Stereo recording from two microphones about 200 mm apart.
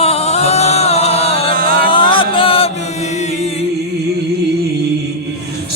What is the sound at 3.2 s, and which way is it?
Chant, 30° left (ahead or behind).